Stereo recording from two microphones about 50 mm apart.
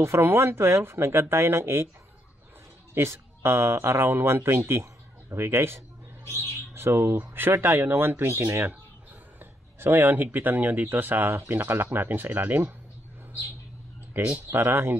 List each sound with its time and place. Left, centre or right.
0.2 s speech: right
2.9 s speech: right
7.5 s speech: right
7.8 s speech: right
14.2 s speech: right